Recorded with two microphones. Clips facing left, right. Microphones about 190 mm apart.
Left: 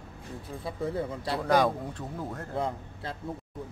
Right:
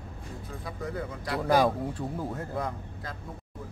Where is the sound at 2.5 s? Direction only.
25° left (ahead or behind).